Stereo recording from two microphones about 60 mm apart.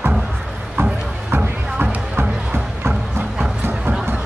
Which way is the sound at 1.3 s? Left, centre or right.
Right.